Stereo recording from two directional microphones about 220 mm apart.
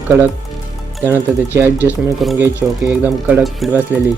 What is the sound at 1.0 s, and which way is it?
Speech, 10° right (ahead or behind).